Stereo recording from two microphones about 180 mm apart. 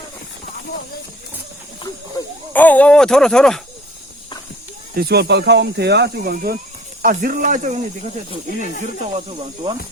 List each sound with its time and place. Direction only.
2.5 s speech: 10° left (ahead or behind)
4.9 s speech: 60° right (ahead or behind)
9.1 s speech: 35° right (ahead or behind)